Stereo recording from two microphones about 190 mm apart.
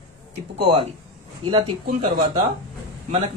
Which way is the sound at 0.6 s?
30° right (ahead or behind).